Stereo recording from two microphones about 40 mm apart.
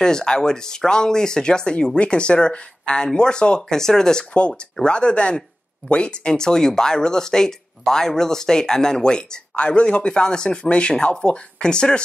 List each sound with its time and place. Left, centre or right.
0.0 s speech: centre